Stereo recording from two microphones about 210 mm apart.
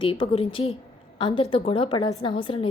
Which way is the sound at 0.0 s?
25° left (ahead or behind).